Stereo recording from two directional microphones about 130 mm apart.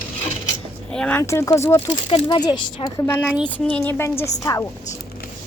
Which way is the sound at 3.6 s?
10° left (ahead or behind).